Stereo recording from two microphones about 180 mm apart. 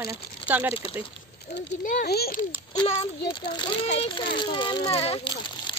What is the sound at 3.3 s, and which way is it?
A child's voice, 25° left (ahead or behind).